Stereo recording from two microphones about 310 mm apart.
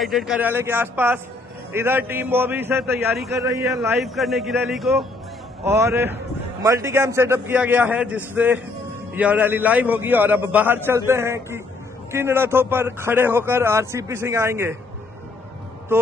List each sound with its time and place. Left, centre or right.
0.0 s a man's voice: centre